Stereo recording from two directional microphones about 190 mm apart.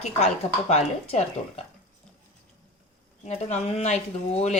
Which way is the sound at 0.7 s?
35° left (ahead or behind).